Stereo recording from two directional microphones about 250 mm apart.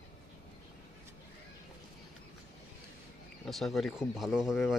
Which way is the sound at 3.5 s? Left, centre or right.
Centre.